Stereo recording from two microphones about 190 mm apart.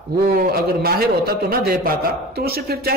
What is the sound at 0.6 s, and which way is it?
Speech, 50° right (ahead or behind).